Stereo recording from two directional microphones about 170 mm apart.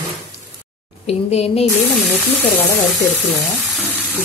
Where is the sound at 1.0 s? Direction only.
40° left (ahead or behind).